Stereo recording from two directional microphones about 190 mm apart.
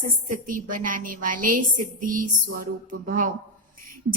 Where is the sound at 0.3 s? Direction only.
45° right (ahead or behind).